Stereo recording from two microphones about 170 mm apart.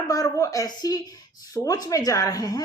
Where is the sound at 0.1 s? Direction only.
20° left (ahead or behind).